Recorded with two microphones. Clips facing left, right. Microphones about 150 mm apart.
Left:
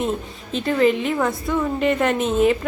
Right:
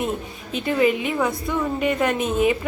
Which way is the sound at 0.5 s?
10° right (ahead or behind).